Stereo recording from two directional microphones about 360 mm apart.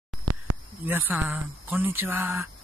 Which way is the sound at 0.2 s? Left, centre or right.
Right.